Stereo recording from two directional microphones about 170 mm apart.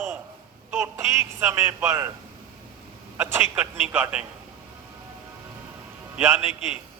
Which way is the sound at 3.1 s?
10° right (ahead or behind).